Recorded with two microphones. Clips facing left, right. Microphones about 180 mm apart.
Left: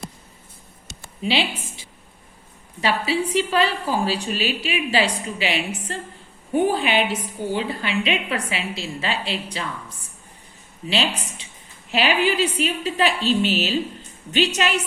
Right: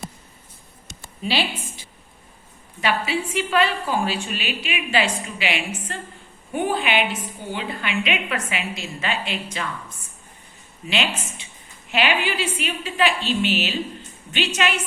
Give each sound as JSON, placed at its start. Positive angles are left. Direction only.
{"t": 1.2, "sound": "a woman's voice", "side_deg": 20}
{"t": 2.8, "sound": "a woman's voice", "side_deg": 35}
{"t": 10.8, "sound": "a woman's voice", "side_deg": 35}